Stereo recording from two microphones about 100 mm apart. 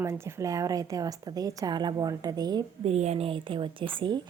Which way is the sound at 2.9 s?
90° right.